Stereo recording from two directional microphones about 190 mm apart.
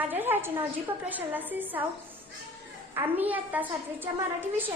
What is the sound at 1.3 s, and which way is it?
Speech, 10° right (ahead or behind).